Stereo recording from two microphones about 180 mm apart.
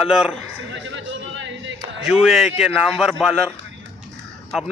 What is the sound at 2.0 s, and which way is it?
A man's voice, 5° right (ahead or behind).